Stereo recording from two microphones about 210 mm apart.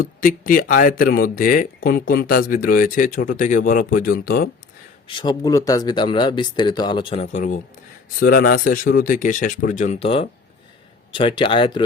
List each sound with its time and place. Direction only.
0.0 s speech: 40° left (ahead or behind)
5.0 s speech: 20° left (ahead or behind)